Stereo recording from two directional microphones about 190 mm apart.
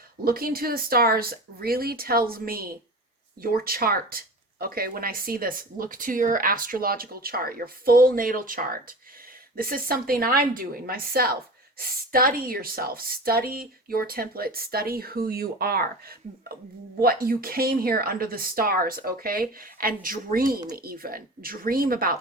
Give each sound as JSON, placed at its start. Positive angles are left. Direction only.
{"t": 0.3, "sound": "a woman's voice", "side_deg": -50}